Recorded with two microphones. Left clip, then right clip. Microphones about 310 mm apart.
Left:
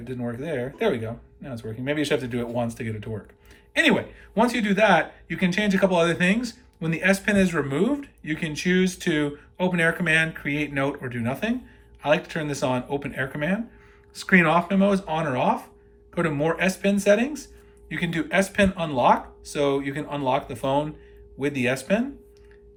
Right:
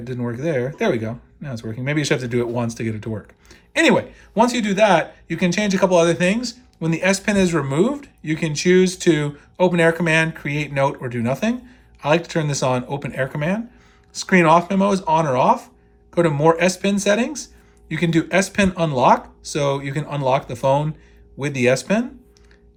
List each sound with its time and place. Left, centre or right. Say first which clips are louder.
0.0 s a man's voice: right 6 dB; centre